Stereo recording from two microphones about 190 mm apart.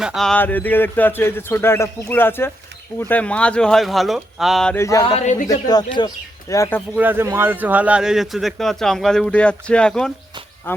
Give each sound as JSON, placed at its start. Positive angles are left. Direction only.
{"t": 0.0, "sound": "a man's voice", "side_deg": 0}
{"t": 4.8, "sound": "speech", "side_deg": 15}
{"t": 5.1, "sound": "a man's voice", "side_deg": 40}
{"t": 5.5, "sound": "speech", "side_deg": 20}
{"t": 6.9, "sound": "a man's voice", "side_deg": -10}